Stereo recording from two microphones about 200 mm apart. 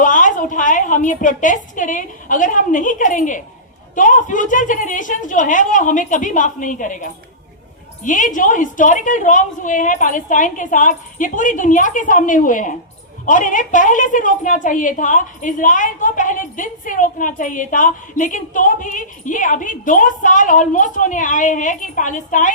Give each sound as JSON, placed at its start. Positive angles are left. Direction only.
{"t": 0.0, "sound": "a woman's voice", "side_deg": 40}